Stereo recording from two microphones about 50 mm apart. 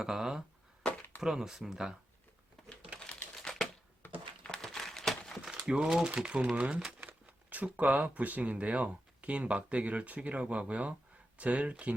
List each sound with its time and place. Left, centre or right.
0.0 s speech: centre
3.0 s typing: left
4.4 s a sound: centre
5.4 s crumpling: centre
6.1 s speech: right
7.0 s speech: right